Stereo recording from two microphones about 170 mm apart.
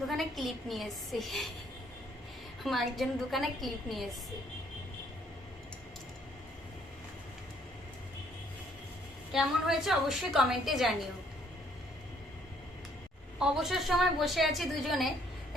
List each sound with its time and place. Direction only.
0.1 s a woman's voice: centre (ahead or behind)
2.6 s a woman's voice: centre (ahead or behind)
9.3 s a woman's voice: centre (ahead or behind)
13.4 s a woman's voice: centre (ahead or behind)